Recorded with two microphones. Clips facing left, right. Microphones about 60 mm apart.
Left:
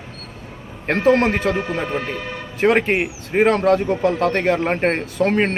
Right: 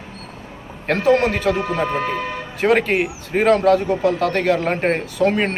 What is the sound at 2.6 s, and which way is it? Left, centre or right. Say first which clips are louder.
Speech: even; left.